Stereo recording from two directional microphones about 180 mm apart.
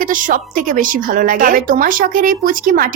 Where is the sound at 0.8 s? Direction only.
50° right (ahead or behind).